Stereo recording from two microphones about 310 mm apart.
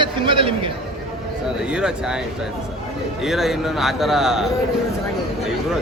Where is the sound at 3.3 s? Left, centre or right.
Centre.